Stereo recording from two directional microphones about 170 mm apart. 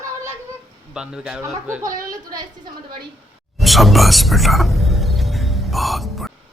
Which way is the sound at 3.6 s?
Centre (ahead or behind).